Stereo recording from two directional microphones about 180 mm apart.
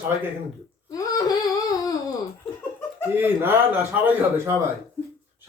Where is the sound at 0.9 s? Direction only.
20° left (ahead or behind).